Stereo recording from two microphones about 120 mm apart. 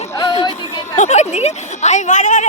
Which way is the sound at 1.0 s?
75° left (ahead or behind).